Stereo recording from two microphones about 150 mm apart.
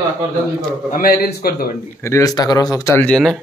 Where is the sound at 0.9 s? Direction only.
80° left.